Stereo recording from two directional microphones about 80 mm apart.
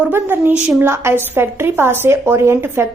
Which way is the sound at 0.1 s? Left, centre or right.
Right.